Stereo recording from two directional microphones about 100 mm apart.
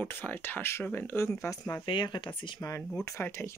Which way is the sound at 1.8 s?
50° left (ahead or behind).